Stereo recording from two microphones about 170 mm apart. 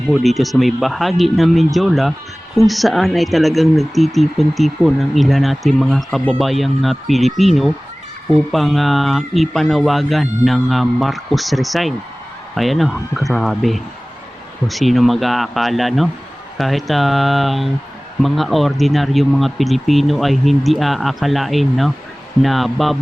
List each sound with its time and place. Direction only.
0.1 s speech: centre (ahead or behind)